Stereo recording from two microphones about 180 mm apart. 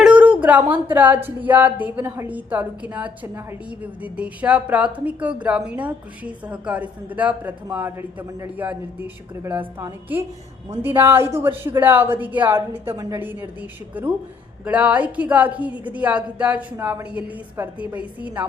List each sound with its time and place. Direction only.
0.0 s speech: 5° right (ahead or behind)